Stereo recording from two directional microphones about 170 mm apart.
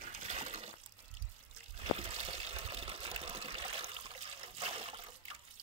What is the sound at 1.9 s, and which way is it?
Water, 35° right (ahead or behind).